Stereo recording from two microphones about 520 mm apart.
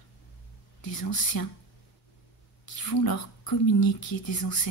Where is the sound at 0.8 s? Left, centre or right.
Left.